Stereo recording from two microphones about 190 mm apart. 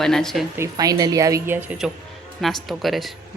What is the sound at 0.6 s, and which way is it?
A woman's voice, 20° right (ahead or behind).